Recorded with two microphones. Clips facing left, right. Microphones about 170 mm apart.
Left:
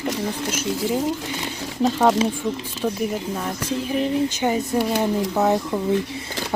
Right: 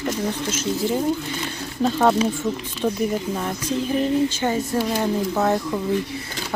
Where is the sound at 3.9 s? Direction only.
15° left (ahead or behind).